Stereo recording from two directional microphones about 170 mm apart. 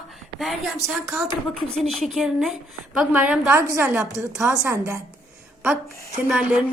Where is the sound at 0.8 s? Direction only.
Centre (ahead or behind).